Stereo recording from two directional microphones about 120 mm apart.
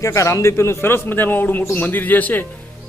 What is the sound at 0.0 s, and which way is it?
Speech, 25° left (ahead or behind).